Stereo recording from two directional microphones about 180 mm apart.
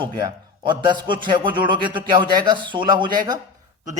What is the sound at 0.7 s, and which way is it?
A man's voice, 25° right (ahead or behind).